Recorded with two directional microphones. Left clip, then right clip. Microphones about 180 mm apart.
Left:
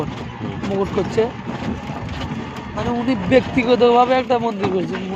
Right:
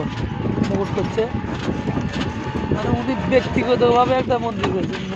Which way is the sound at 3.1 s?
50° left (ahead or behind).